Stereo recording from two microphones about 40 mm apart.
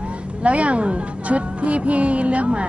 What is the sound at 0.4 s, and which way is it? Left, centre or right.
A woman's voice, right.